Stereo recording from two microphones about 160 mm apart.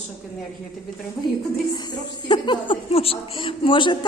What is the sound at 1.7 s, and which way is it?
Speech, 25° left (ahead or behind).